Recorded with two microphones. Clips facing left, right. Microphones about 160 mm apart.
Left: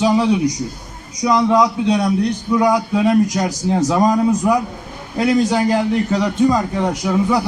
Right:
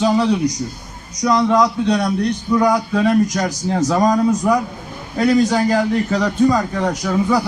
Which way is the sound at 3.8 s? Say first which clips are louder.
Even; 5° left (ahead or behind).